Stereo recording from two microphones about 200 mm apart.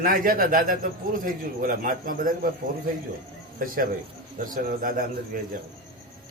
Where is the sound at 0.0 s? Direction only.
45° right (ahead or behind).